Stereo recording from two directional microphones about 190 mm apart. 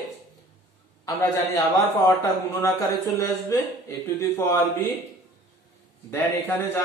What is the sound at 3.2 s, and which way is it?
Speech, 15° left (ahead or behind).